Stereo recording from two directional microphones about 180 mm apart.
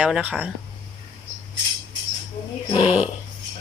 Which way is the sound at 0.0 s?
10° right (ahead or behind).